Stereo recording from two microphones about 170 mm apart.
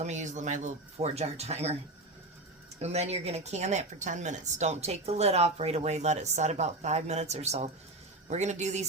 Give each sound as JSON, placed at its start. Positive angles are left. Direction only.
{"t": 0.0, "sound": "speech", "side_deg": -45}
{"t": 2.7, "sound": "speech", "side_deg": -40}